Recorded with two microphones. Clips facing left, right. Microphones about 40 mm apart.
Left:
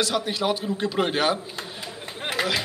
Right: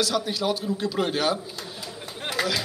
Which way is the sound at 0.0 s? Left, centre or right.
Left.